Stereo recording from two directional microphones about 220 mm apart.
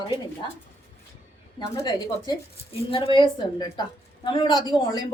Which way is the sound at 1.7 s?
15° left (ahead or behind).